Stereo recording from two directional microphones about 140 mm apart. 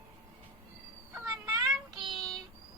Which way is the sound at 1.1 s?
25° right (ahead or behind).